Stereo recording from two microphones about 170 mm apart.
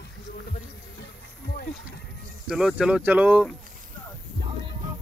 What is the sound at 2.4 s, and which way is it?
Speech, 5° right (ahead or behind).